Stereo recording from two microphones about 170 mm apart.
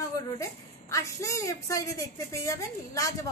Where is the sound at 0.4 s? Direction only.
20° left (ahead or behind).